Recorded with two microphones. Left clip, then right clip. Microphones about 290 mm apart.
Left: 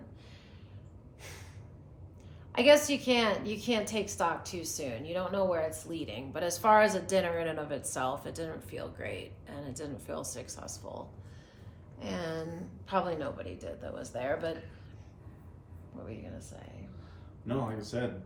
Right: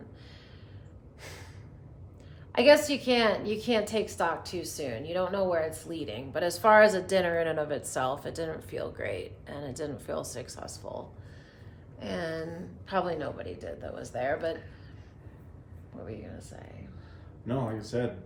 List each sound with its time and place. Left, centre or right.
1.2 s gasp: centre
2.5 s a woman's voice: centre
15.9 s a woman's voice: centre
17.4 s a woman's voice: centre